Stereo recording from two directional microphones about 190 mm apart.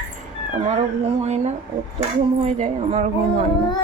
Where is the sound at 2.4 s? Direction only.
35° right (ahead or behind).